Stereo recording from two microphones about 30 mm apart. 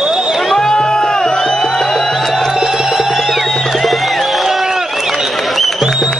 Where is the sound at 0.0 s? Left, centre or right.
Right.